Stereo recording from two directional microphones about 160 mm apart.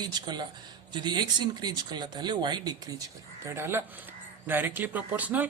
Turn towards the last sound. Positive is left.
turn(degrees=-10)  # may be behind; listen again after turning